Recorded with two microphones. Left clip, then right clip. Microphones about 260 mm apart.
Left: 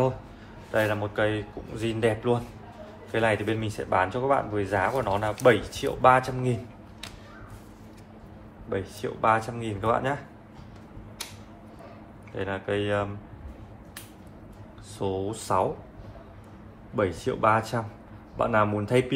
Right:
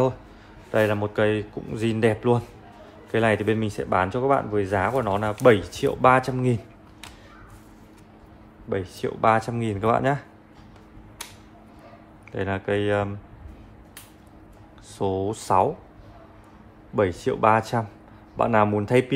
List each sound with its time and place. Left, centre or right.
0.7 s speech: right
8.6 s speech: right
12.4 s speech: right
15.0 s speech: right
16.9 s speech: right